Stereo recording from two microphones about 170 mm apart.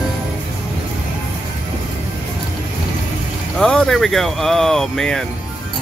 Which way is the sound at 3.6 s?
5° left (ahead or behind).